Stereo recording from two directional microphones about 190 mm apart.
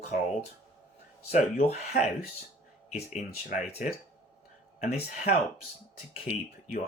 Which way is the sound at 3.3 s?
40° left (ahead or behind).